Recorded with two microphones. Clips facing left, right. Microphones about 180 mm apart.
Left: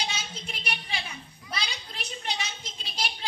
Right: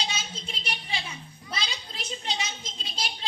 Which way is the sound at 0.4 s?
25° right (ahead or behind).